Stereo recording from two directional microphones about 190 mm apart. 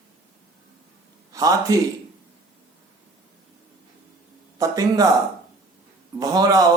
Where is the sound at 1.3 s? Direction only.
20° right (ahead or behind).